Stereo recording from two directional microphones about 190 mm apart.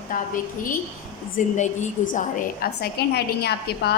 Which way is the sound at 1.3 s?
40° left (ahead or behind).